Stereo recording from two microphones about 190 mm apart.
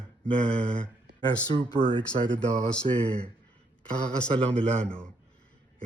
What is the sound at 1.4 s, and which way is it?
Speech, 20° left (ahead or behind).